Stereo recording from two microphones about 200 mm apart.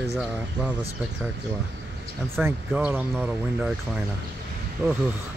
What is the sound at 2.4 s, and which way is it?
Speech, 10° right (ahead or behind).